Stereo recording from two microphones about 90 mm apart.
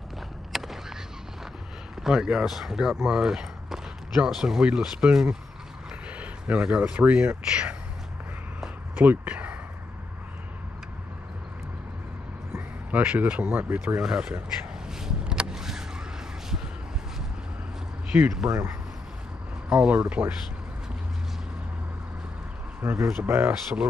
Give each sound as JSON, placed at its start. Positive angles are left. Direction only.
{"t": 0.5, "sound": "a sound", "side_deg": -5}
{"t": 2.0, "sound": "speech", "side_deg": -5}
{"t": 8.9, "sound": "a sound", "side_deg": -20}
{"t": 12.5, "sound": "speech", "side_deg": -15}
{"t": 15.0, "sound": "vehicle", "side_deg": -5}
{"t": 18.1, "sound": "speech", "side_deg": -30}
{"t": 19.7, "sound": "speech", "side_deg": -10}
{"t": 22.8, "sound": "speech", "side_deg": -25}